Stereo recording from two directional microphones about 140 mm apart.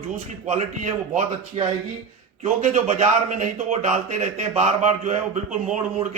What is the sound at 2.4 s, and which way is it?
A man's voice, 60° right (ahead or behind).